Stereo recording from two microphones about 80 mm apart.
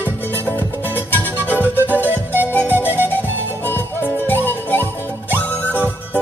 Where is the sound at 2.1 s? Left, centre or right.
Right.